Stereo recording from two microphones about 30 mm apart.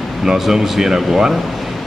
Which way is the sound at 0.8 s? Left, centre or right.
Right.